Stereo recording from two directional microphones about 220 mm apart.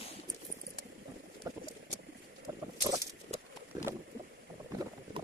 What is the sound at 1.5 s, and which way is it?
Patter, 15° right (ahead or behind).